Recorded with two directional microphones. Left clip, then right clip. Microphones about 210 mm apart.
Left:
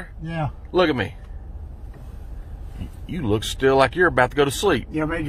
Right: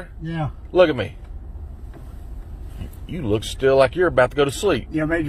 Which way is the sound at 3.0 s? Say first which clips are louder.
Even; 15° left (ahead or behind).